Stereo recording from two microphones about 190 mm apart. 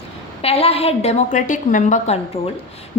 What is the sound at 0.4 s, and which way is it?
Speech, 30° left (ahead or behind).